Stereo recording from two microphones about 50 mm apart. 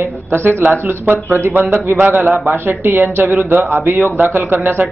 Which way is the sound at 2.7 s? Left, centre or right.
Right.